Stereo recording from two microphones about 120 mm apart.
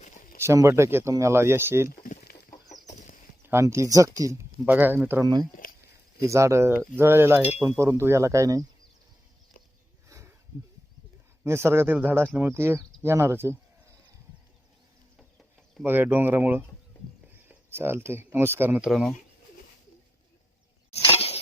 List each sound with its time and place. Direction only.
0.4 s speech: 25° right (ahead or behind)
2.8 s chicken: 85° left
3.4 s speech: 20° right (ahead or behind)
5.2 s speech: 30° right (ahead or behind)
11.4 s speech: 20° right (ahead or behind)
15.8 s speech: 15° right (ahead or behind)
17.7 s speech: 20° right (ahead or behind)
18.9 s speech: centre (ahead or behind)
20.9 s a sound: 55° left (ahead or behind)